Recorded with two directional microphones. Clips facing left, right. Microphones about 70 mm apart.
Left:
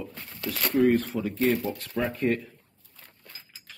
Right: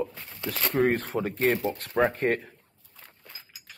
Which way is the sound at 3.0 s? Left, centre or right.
Centre.